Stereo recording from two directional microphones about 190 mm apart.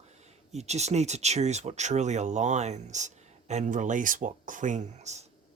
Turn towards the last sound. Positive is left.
turn(degrees=-35)  # may be behind; listen again after turning